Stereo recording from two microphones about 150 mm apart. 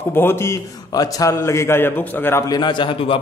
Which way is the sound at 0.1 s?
15° left (ahead or behind).